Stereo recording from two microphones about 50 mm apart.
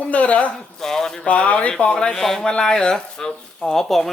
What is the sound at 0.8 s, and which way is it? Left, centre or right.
Speech, centre.